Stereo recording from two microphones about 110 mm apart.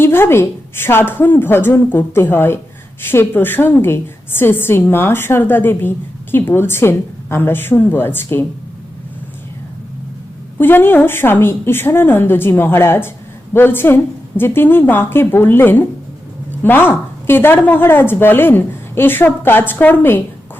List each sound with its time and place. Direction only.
0.0 s a woman's voice: 20° left (ahead or behind)
10.6 s a woman's voice: 20° left (ahead or behind)